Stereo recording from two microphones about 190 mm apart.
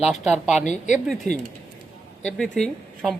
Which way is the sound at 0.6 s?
40° left (ahead or behind).